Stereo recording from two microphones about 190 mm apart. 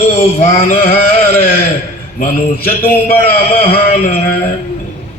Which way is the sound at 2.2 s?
50° left (ahead or behind).